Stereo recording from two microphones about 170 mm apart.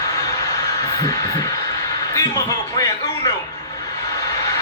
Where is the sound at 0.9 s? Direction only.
20° left (ahead or behind).